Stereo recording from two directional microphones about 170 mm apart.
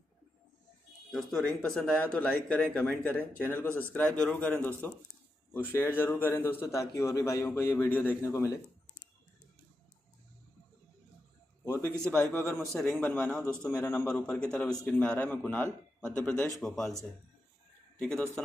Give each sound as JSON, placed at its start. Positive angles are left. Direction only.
{"t": 1.1, "sound": "a man's voice", "side_deg": 0}
{"t": 11.9, "sound": "a man's voice", "side_deg": 5}
{"t": 17.9, "sound": "a man's voice", "side_deg": 5}